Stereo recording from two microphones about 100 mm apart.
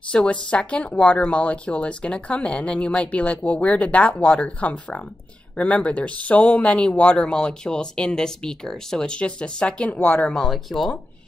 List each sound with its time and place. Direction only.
0.1 s speech: 10° left (ahead or behind)